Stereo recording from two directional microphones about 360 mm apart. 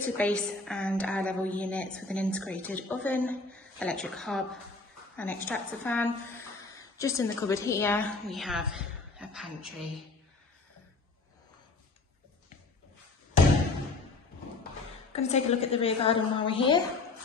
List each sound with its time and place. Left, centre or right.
0.0 s a woman's voice: centre
15.1 s a woman's voice: centre